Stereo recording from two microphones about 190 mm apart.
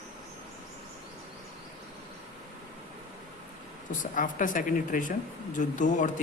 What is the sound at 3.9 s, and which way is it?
Speech, 45° left (ahead or behind).